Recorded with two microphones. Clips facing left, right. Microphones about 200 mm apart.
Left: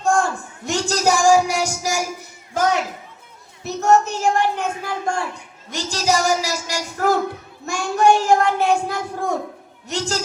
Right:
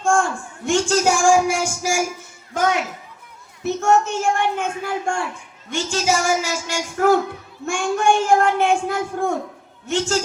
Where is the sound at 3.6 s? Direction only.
40° left (ahead or behind).